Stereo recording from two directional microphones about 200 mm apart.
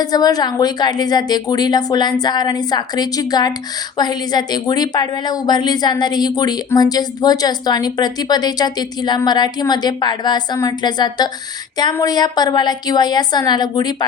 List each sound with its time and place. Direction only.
0.0 s a woman's voice: 20° left (ahead or behind)